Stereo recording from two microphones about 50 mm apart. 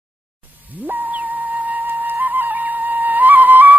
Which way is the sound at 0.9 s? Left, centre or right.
Right.